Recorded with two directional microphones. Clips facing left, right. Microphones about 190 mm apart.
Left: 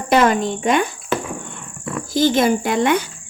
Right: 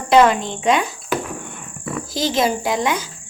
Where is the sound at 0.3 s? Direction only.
50° left (ahead or behind).